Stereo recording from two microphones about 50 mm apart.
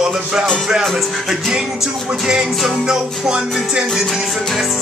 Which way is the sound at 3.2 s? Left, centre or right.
Centre.